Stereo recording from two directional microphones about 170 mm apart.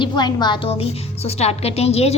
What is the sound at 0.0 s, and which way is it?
A woman's voice, 25° left (ahead or behind).